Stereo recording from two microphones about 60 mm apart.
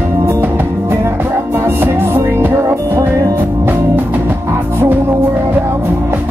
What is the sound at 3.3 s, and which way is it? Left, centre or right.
Music, right.